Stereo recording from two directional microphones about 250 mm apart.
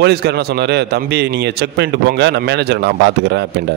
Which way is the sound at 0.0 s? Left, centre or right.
Right.